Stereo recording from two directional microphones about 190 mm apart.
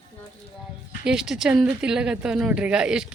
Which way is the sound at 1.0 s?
5° right (ahead or behind).